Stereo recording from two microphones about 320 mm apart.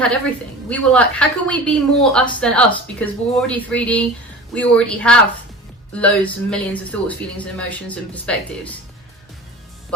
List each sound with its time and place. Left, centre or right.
0.7 s a woman's voice: centre